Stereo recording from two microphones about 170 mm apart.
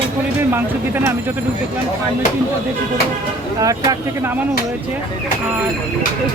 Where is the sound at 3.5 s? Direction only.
20° right (ahead or behind).